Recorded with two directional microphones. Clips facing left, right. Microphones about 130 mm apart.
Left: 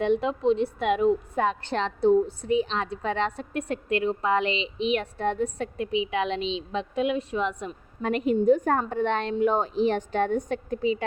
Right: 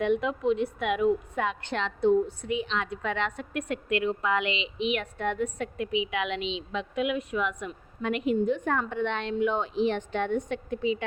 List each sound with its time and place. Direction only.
0.0 s a woman's voice: 30° left (ahead or behind)